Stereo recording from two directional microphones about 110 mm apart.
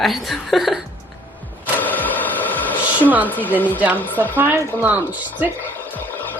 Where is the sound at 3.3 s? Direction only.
15° left (ahead or behind).